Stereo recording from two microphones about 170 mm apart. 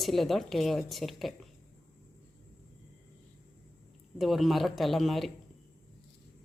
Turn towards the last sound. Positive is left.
turn(degrees=0)  # may be behind; listen again after turning